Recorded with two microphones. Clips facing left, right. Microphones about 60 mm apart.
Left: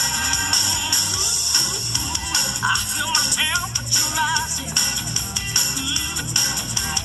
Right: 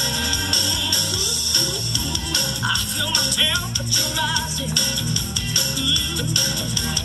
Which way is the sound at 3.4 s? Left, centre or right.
Left.